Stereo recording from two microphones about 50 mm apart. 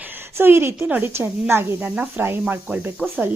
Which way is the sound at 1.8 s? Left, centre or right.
Right.